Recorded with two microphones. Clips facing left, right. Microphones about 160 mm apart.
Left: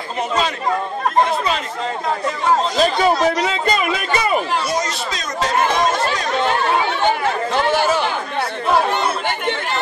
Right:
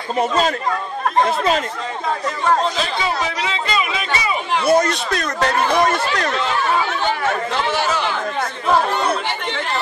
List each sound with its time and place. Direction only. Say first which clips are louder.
2.8 s speech: left 7 dB; 45° left (ahead or behind)
4.6 s speech: right 6 dB; 60° right (ahead or behind)